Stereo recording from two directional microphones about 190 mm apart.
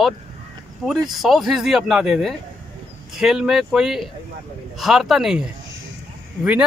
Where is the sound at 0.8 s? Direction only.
Centre (ahead or behind).